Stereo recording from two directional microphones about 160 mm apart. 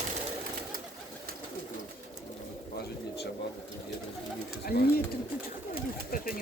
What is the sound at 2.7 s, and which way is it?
Bird, 90° left.